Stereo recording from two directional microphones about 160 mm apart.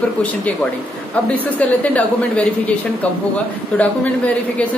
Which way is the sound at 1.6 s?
10° left (ahead or behind).